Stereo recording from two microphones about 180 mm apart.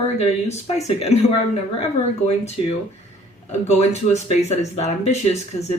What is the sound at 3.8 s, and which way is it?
Speech, 40° left (ahead or behind).